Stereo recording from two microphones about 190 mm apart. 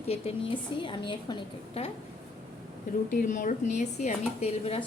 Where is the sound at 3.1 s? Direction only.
45° left (ahead or behind).